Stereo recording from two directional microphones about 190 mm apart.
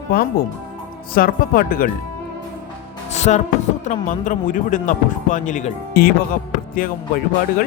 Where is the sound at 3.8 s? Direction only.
40° left (ahead or behind).